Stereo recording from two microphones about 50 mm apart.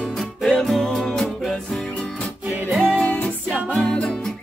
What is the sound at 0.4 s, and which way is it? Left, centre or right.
Music, centre.